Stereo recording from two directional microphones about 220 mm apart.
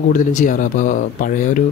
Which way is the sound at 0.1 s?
35° left (ahead or behind).